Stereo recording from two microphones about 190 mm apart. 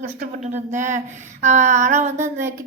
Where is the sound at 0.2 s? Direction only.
40° right (ahead or behind).